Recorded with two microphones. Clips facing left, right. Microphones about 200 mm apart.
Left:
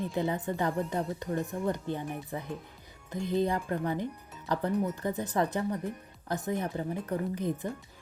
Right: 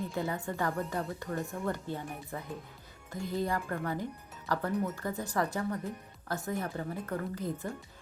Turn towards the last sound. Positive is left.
turn(degrees=20)  # may be behind; listen again after turning